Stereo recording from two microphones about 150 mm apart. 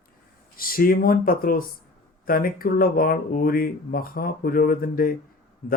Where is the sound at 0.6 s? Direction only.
75° left (ahead or behind).